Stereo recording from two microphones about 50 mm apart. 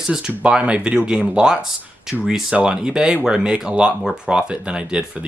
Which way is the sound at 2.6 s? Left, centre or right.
Centre.